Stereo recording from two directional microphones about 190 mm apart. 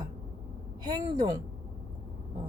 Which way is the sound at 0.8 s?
20° right (ahead or behind).